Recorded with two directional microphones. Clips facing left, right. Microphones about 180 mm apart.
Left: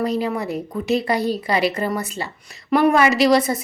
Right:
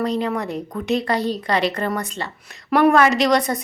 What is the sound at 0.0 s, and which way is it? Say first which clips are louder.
A woman's voice: even; 5° left (ahead or behind).